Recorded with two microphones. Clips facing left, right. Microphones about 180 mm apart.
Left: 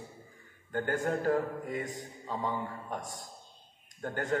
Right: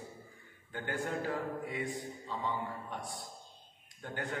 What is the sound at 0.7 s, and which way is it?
A man's voice, 45° left (ahead or behind).